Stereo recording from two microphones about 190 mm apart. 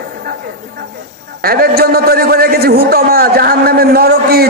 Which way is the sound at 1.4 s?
50° right (ahead or behind).